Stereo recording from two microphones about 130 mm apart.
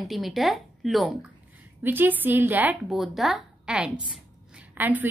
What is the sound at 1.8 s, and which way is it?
Speech, 15° right (ahead or behind).